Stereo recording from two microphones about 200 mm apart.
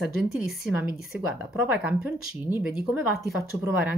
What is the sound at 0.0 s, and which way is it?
Speech, centre (ahead or behind).